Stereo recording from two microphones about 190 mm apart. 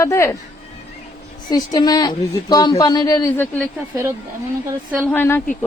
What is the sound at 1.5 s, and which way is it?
Speech, 20° left (ahead or behind).